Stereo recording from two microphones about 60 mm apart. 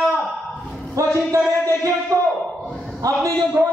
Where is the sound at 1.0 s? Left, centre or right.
Right.